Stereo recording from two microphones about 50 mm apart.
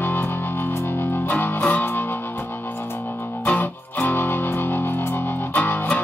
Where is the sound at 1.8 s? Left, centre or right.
Left.